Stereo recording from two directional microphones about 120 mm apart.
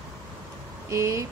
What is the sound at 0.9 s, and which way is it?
Speech, 25° right (ahead or behind).